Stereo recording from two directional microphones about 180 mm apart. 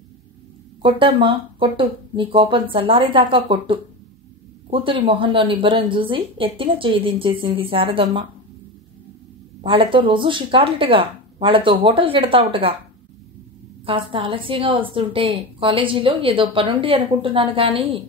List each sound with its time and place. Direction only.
0.8 s a woman's voice: 30° right (ahead or behind)
9.6 s a woman's voice: 30° right (ahead or behind)
13.8 s a woman's voice: 30° right (ahead or behind)